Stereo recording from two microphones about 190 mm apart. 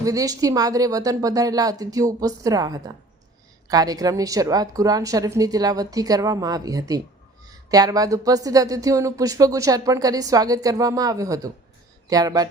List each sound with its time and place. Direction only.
0.0 s speech: 20° right (ahead or behind)